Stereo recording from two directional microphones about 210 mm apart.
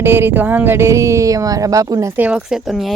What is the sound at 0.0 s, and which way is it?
Speech, 10° right (ahead or behind).